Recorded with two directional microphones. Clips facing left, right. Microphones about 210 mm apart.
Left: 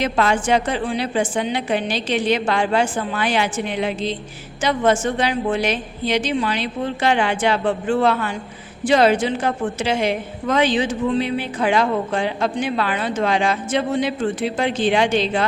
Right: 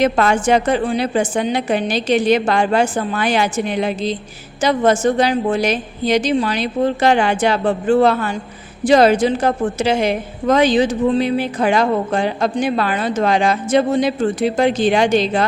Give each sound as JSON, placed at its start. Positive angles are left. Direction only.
{"t": 0.0, "sound": "a woman's voice", "side_deg": -50}